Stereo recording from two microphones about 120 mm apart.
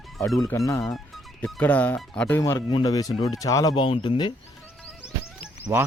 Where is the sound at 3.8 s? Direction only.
45° left (ahead or behind).